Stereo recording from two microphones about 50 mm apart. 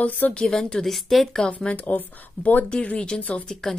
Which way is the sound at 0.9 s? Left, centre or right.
Centre.